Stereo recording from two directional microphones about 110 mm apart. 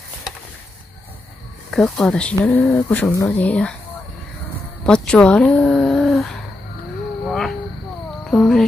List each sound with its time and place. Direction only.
1.7 s speech: 5° left (ahead or behind)
4.8 s speech: 10° left (ahead or behind)
7.2 s a sound: 5° left (ahead or behind)
8.3 s cat: 5° left (ahead or behind)